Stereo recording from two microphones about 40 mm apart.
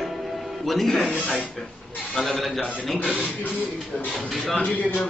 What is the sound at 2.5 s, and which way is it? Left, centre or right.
Speech, left.